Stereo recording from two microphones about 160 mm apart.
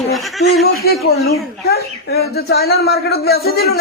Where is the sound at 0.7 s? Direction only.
70° left (ahead or behind).